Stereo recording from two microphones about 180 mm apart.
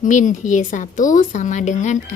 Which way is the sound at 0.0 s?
45° left (ahead or behind).